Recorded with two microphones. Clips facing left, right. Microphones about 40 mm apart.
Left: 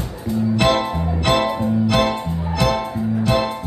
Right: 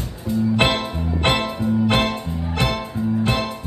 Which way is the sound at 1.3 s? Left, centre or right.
Right.